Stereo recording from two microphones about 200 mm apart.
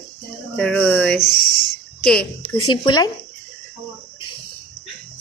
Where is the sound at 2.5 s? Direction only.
25° left (ahead or behind).